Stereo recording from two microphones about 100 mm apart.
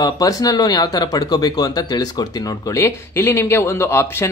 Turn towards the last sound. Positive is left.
turn(degrees=25)  # may be behind; listen again after turning